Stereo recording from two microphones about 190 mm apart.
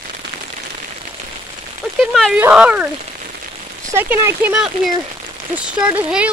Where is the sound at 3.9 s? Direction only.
15° right (ahead or behind).